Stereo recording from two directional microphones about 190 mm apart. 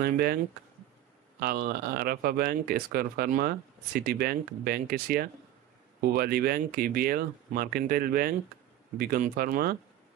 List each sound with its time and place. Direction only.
0.0 s speech: 55° right (ahead or behind)
1.4 s speech: 55° right (ahead or behind)